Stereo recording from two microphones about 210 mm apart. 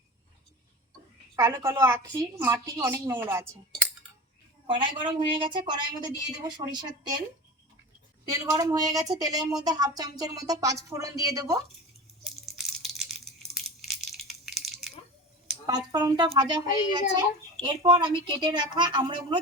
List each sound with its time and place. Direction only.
1.4 s speech: 15° right (ahead or behind)
4.6 s a child's voice: 25° right (ahead or behind)
8.2 s speech: 15° right (ahead or behind)
12.4 s a sound: centre (ahead or behind)
15.6 s a child's voice: 20° right (ahead or behind)